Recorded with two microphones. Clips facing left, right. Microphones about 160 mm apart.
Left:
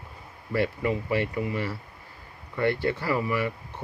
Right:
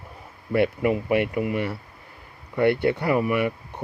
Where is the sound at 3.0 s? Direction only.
20° right (ahead or behind).